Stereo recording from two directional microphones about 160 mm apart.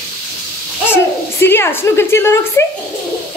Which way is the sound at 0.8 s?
15° left (ahead or behind).